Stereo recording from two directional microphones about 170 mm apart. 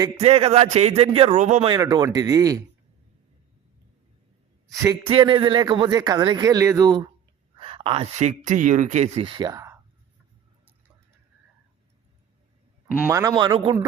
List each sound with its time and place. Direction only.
0.2 s speech: 35° right (ahead or behind)
1.7 s speech: 25° right (ahead or behind)
5.0 s speech: 30° right (ahead or behind)
9.2 s speech: 25° right (ahead or behind)
13.0 s speech: 15° right (ahead or behind)